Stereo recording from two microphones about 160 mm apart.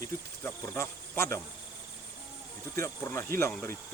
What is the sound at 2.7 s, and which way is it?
Speech, 15° left (ahead or behind).